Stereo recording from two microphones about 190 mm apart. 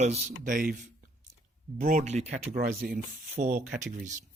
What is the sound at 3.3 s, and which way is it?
Speech, 40° right (ahead or behind).